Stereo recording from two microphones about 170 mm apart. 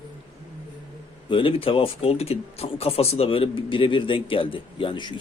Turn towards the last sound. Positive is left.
turn(degrees=30)  # may be behind; listen again after turning